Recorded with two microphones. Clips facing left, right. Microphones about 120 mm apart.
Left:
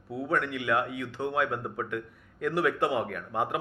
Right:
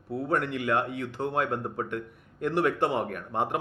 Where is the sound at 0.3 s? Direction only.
45° right (ahead or behind).